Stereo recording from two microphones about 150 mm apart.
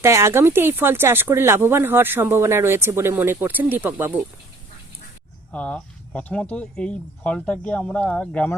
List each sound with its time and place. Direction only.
0.0 s speech: 20° right (ahead or behind)
5.5 s speech: 10° left (ahead or behind)